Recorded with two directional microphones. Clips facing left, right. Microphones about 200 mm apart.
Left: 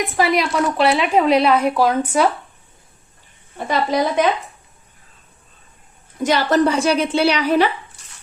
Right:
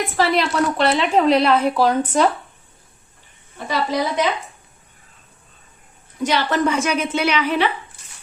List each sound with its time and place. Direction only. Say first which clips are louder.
0.0 s a woman's voice: left 1 dB; 15° left (ahead or behind)
3.7 s a woman's voice: left 3 dB; 55° left (ahead or behind)
6.2 s a woman's voice: left 3 dB; 45° left (ahead or behind)